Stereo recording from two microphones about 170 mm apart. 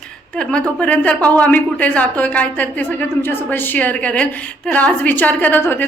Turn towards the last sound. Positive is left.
turn(degrees=10)  # may be behind; listen again after turning